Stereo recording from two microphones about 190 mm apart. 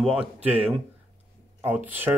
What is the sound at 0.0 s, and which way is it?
Speech, 5° right (ahead or behind).